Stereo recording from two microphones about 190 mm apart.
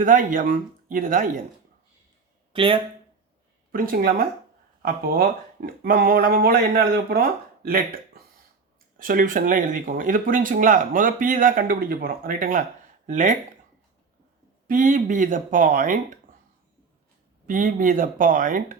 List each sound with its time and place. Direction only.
0.0 s speech: 45° right (ahead or behind)
2.5 s speech: 25° right (ahead or behind)
3.7 s speech: 50° right (ahead or behind)
14.7 s speech: 40° right (ahead or behind)
17.4 s speech: 45° right (ahead or behind)